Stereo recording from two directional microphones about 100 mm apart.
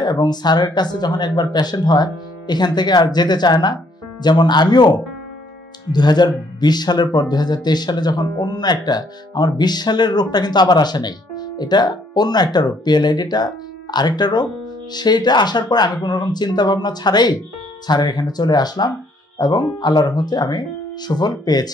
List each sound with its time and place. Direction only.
0.0 s speech: 45° left (ahead or behind)